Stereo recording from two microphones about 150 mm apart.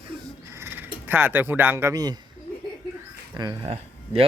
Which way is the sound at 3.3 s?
30° right (ahead or behind).